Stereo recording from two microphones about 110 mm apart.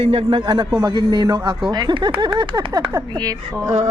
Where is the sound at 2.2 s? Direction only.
45° right (ahead or behind).